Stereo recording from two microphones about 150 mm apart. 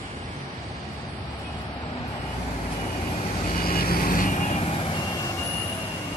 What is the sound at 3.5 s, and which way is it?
Vehicle, 80° left.